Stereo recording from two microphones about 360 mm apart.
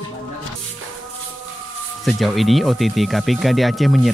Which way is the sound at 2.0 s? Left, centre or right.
Centre.